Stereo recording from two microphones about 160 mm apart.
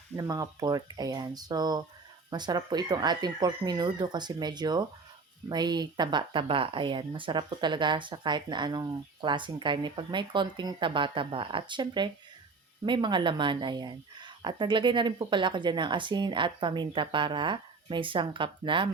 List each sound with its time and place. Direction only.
0.2 s speech: 25° right (ahead or behind)